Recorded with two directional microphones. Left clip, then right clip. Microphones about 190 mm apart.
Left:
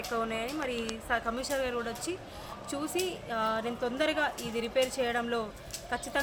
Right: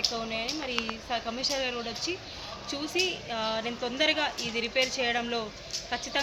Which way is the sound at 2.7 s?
10° left (ahead or behind).